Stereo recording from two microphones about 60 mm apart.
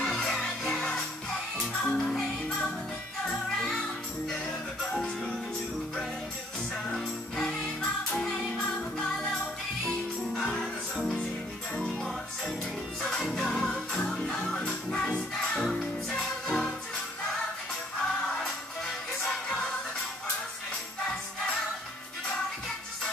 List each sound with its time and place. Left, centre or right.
0.0 s music: centre
4.8 s music: centre
6.9 s music: centre
18.2 s music: centre